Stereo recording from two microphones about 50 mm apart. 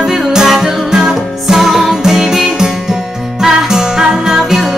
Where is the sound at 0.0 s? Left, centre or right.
Centre.